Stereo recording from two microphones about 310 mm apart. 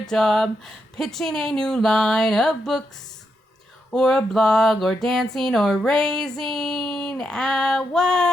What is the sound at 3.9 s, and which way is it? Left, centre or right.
Speech, centre.